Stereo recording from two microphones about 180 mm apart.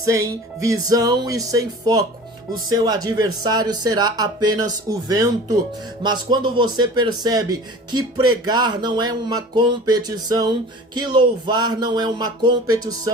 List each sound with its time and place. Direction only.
0.0 s speech: 15° right (ahead or behind)